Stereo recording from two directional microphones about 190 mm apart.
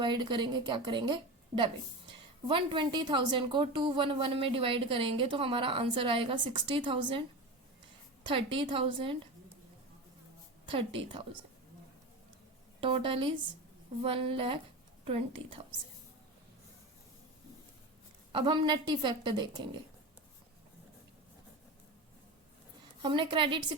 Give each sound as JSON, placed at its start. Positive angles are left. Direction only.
{"t": 0.0, "sound": "a woman's voice", "side_deg": -25}
{"t": 8.3, "sound": "a woman's voice", "side_deg": -25}
{"t": 10.7, "sound": "a woman's voice", "side_deg": -25}
{"t": 12.8, "sound": "a woman's voice", "side_deg": -25}
{"t": 18.3, "sound": "a woman's voice", "side_deg": -25}
{"t": 23.0, "sound": "a woman's voice", "side_deg": -25}